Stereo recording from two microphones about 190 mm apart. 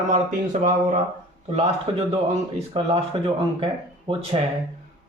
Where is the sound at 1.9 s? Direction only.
30° right (ahead or behind).